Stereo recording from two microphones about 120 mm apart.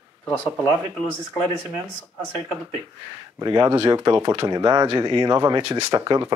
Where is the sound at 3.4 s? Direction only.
40° right (ahead or behind).